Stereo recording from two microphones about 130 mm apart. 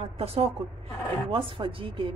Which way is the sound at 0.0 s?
50° right (ahead or behind).